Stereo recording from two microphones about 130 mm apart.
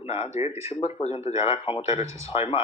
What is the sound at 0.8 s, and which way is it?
Speech, 55° left (ahead or behind).